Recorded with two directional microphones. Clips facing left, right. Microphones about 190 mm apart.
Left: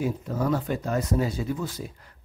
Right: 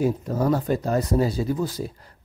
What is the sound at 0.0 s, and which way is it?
Speech, 40° right (ahead or behind).